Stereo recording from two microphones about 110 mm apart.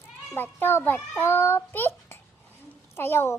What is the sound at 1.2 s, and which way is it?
Child singing, 20° left (ahead or behind).